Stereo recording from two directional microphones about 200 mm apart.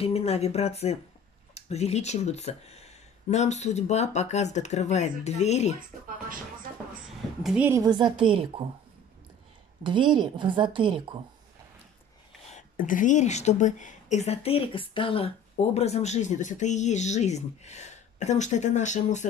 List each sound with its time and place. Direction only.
0.0 s a woman's voice: 30° left (ahead or behind)
7.4 s a woman's voice: 5° right (ahead or behind); by 8.6 s 25° right (ahead or behind)
9.8 s a woman's voice: 25° right (ahead or behind)
12.4 s a woman's voice: 40° left (ahead or behind)